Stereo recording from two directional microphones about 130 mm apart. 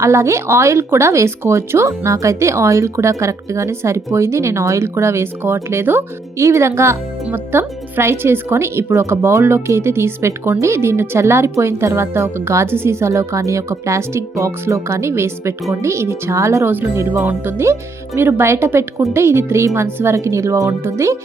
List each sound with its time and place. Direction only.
0.0 s speech: 20° right (ahead or behind)